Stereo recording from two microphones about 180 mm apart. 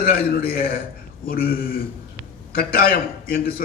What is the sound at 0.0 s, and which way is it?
A man's voice, 55° left (ahead or behind).